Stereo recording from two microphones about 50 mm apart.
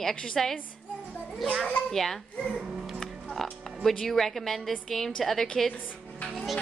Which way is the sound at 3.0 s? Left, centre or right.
Centre.